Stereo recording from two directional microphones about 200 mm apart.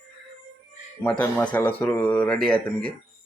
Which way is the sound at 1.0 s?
5° left (ahead or behind).